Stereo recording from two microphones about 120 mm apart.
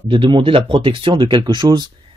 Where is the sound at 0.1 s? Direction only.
45° right (ahead or behind).